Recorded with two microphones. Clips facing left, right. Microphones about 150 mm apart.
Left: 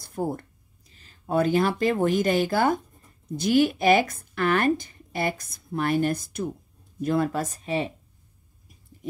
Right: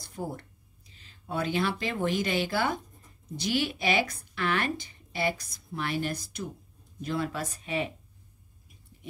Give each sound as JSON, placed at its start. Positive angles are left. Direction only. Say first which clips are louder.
{"t": 0.0, "sound": "speech", "louder": "left 7 dB", "side_deg": 50}